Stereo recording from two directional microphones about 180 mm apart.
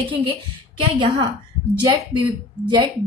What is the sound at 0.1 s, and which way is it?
Speech, 25° right (ahead or behind).